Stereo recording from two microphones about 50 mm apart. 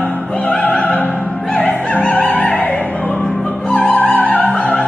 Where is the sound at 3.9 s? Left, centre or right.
Left.